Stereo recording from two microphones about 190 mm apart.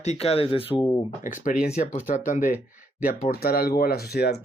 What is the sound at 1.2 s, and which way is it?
Speech, 45° left (ahead or behind).